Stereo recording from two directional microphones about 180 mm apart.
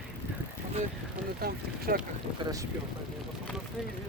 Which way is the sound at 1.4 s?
55° right (ahead or behind).